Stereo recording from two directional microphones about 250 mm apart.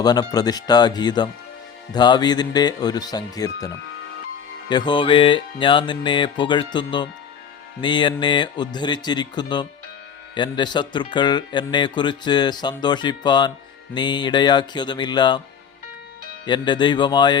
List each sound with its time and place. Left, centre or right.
0.0 s speech: centre
4.7 s music: centre
7.8 s speech: centre
16.5 s speech: centre